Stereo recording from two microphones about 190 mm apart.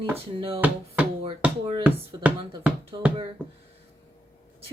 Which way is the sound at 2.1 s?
25° right (ahead or behind).